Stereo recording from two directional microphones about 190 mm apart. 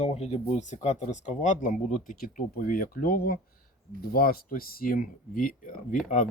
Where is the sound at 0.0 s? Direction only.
35° left (ahead or behind).